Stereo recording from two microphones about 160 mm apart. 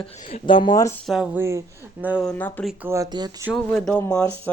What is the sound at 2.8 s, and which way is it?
Speech, 20° right (ahead or behind).